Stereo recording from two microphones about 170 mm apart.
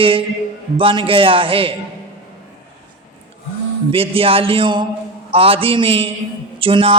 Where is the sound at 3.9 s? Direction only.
30° right (ahead or behind).